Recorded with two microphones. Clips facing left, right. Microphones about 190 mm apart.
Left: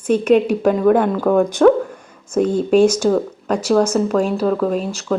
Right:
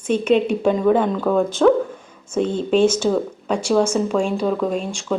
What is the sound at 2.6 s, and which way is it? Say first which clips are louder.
Speech: left 3 dB; 5° left (ahead or behind).